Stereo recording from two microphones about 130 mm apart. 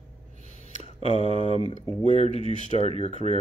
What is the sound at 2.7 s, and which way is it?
Speech, 50° right (ahead or behind).